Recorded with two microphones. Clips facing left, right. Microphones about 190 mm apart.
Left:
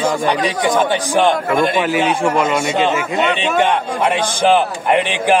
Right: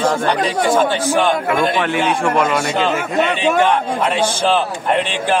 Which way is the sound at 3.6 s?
15° left (ahead or behind).